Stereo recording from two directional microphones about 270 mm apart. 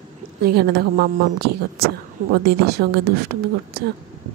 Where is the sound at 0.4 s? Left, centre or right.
Right.